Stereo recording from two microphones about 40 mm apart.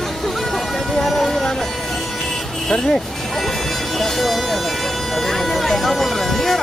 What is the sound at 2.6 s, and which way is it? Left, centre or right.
Speech, centre.